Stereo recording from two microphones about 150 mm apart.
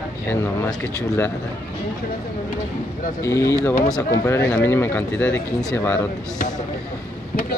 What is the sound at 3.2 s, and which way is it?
Speech, 20° left (ahead or behind).